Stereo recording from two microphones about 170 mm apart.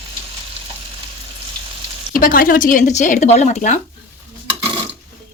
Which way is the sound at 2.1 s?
55° left (ahead or behind).